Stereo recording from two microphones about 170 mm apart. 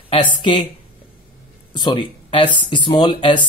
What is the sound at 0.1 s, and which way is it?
Speech, 30° left (ahead or behind).